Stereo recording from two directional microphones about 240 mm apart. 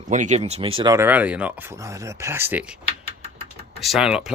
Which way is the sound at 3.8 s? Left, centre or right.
Centre.